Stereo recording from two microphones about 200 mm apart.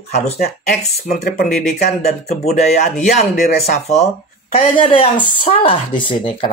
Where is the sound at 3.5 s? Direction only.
35° left (ahead or behind).